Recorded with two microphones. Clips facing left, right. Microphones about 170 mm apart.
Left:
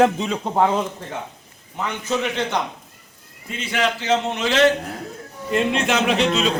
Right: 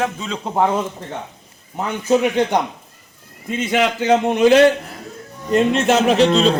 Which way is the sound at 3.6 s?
15° right (ahead or behind).